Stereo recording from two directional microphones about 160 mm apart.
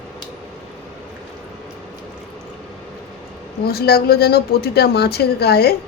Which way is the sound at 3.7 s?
75° left (ahead or behind).